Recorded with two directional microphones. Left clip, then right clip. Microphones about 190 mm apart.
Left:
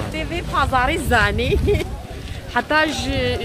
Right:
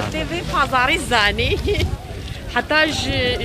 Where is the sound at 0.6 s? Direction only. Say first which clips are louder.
Right 1 dB; 20° left (ahead or behind).